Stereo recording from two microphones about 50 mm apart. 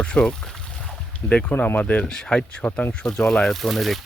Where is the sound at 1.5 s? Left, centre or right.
Left.